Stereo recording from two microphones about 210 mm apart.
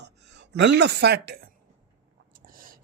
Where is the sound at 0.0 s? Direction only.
55° right (ahead or behind).